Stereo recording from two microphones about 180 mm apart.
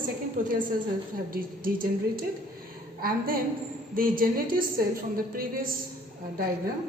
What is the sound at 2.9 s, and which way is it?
A woman's voice, 55° right (ahead or behind).